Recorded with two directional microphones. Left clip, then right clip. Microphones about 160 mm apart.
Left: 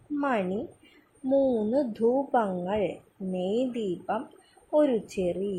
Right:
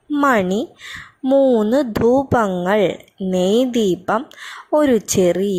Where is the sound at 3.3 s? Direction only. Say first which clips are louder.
Right 13 dB; 65° right (ahead or behind).